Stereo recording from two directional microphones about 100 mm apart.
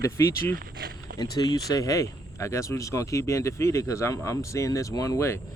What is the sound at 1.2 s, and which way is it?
Speech, 40° left (ahead or behind).